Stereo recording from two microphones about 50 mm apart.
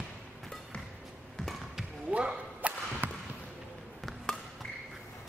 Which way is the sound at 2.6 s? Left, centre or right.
Right.